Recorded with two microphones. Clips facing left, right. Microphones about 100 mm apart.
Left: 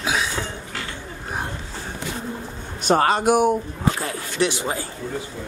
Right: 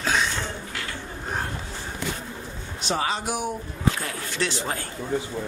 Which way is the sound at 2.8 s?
55° left (ahead or behind).